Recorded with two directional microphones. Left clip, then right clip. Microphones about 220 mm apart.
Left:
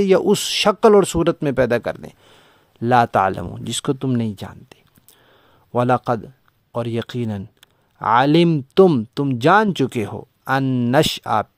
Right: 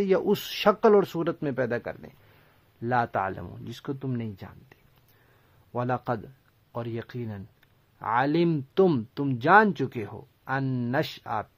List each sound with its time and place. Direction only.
0.0 s speech: 45° left (ahead or behind)